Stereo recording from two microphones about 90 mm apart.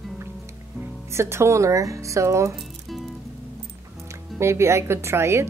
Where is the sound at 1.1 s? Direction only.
30° right (ahead or behind).